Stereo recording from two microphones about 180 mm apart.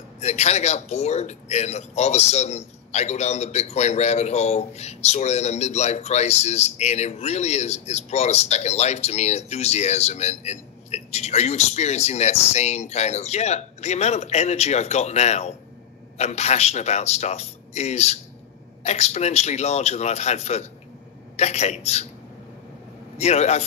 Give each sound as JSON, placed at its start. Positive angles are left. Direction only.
{"t": 0.2, "sound": "a man's voice", "side_deg": 35}
{"t": 23.1, "sound": "a man's voice", "side_deg": 35}